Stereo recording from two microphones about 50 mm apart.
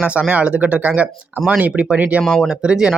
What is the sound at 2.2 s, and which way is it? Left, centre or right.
Speech, centre.